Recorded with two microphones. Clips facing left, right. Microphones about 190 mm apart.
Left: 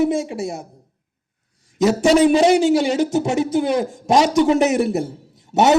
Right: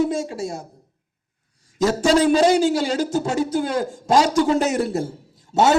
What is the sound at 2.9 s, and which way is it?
A man's voice, 20° left (ahead or behind).